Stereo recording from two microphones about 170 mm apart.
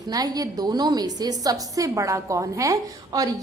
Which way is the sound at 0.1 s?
20° right (ahead or behind).